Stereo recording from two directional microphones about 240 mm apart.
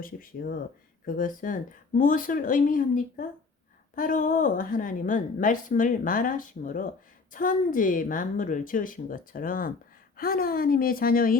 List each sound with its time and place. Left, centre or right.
0.0 s a woman's voice: left